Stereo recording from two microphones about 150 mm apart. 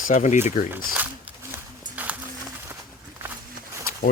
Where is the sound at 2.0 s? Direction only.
10° right (ahead or behind).